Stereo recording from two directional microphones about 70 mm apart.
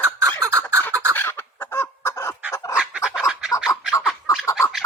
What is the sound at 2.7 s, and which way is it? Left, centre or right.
Fowl, centre.